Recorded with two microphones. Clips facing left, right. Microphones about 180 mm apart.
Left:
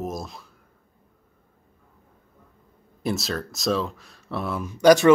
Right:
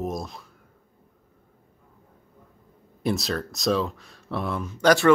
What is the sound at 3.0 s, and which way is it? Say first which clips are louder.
Speech: right 1 dB; centre (ahead or behind).